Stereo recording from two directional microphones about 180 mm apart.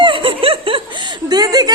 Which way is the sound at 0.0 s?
30° right (ahead or behind).